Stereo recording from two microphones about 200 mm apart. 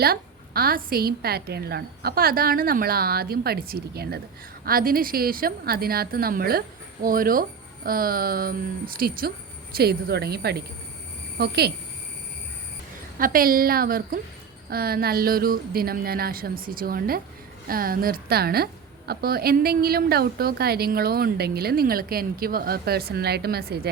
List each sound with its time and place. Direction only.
0.0 s a woman's voice: 50° right (ahead or behind)
13.1 s a woman's voice: 45° right (ahead or behind)